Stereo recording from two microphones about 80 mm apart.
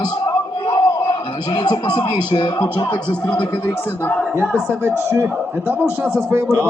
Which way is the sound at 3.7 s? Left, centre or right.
Left.